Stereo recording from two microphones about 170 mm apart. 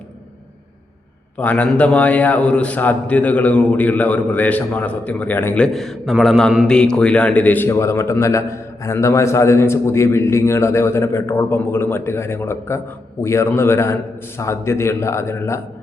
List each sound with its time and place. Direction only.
1.4 s a man's voice: 10° left (ahead or behind)